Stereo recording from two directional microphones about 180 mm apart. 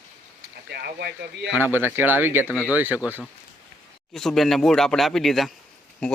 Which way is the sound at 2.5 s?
15° left (ahead or behind).